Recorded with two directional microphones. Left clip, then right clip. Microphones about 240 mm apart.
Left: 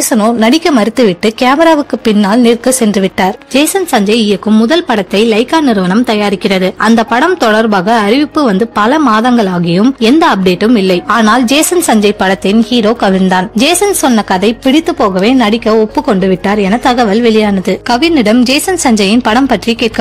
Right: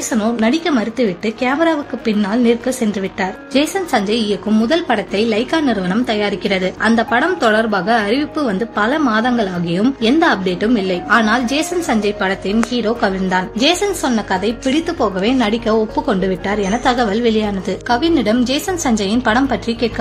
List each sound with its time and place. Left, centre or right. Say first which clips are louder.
0.1 s speech: left 8 dB; left